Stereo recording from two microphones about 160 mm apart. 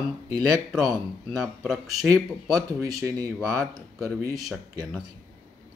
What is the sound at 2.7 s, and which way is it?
Speech, 25° right (ahead or behind).